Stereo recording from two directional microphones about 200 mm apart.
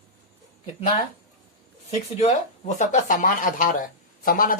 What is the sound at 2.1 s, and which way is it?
Speech, 35° left (ahead or behind).